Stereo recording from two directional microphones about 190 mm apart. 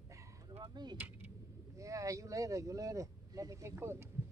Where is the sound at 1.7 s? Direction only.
15° right (ahead or behind).